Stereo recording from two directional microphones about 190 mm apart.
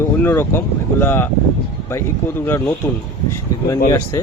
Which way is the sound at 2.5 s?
15° left (ahead or behind).